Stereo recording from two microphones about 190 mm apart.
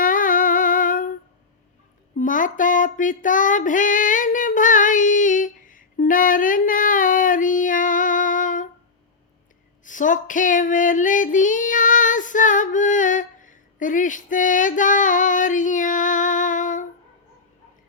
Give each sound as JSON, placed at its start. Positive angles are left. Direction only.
{"t": 0.0, "sound": "humming", "side_deg": 45}
{"t": 2.1, "sound": "female singing", "side_deg": 45}
{"t": 9.8, "sound": "female singing", "side_deg": 40}